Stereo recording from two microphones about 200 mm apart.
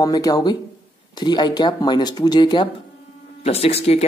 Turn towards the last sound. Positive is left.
turn(degrees=30)  # may be behind; listen again after turning